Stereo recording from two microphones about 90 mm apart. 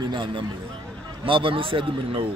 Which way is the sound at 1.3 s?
75° right (ahead or behind).